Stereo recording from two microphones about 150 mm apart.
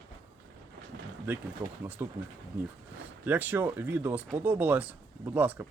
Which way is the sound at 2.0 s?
15° right (ahead or behind).